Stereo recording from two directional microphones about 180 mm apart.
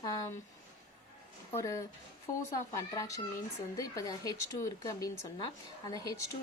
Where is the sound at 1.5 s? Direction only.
15° left (ahead or behind).